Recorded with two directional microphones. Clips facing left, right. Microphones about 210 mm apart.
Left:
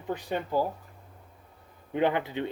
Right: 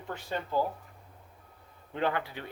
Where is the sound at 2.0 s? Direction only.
20° left (ahead or behind).